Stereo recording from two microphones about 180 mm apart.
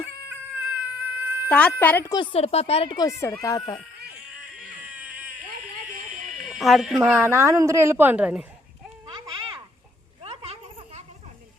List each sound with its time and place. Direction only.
0.0 s cat: 10° right (ahead or behind)
1.5 s a woman's voice: 5° left (ahead or behind)
2.1 s speech: 30° left (ahead or behind)
4.9 s cat: 10° right (ahead or behind)
5.9 s a sound: 45° right (ahead or behind)
6.5 s speech: centre (ahead or behind)
7.1 s a woman's voice: 15° right (ahead or behind)
10.2 s a sound: 35° right (ahead or behind)